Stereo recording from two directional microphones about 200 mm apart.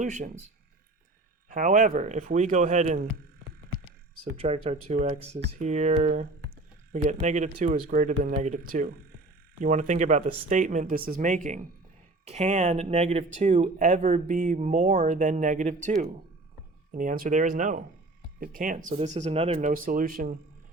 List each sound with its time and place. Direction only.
0.0 s speech: 35° right (ahead or behind)
1.5 s speech: 40° right (ahead or behind)
4.2 s speech: 30° right (ahead or behind)
16.9 s speech: 40° right (ahead or behind)